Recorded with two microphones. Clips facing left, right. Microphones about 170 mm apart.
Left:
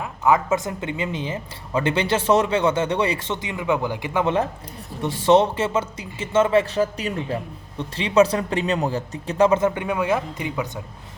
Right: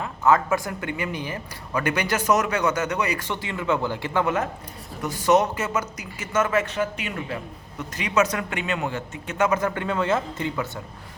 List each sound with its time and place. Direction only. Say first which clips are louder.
0.0 s speech: left 1 dB; 15° left (ahead or behind)
5.0 s speech: left 3 dB; 25° left (ahead or behind)